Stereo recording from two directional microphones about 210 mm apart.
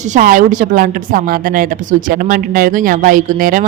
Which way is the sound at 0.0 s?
35° right (ahead or behind).